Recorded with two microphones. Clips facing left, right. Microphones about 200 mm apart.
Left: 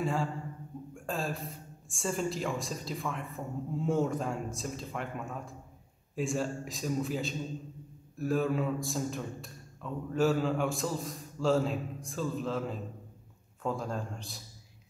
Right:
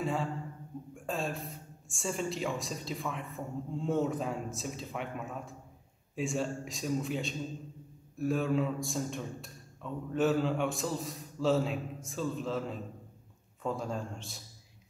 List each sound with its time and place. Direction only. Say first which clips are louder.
0.0 s a man's voice: left 1 dB; centre (ahead or behind)